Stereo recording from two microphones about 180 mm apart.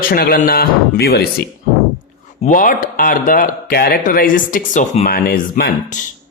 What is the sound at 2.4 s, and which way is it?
Speech, 45° left (ahead or behind).